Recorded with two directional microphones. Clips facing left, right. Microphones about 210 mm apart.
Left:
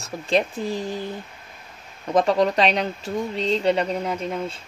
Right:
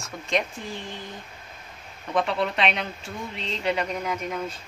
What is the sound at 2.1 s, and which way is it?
Speech, 40° left (ahead or behind).